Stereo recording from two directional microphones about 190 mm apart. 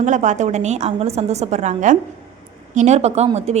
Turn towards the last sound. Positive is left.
turn(degrees=-35)  # may be behind; listen again after turning